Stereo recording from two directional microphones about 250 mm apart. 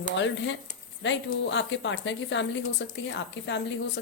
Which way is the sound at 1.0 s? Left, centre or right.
Left.